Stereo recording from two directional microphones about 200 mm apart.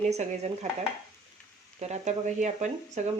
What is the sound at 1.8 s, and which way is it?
Speech, 35° right (ahead or behind).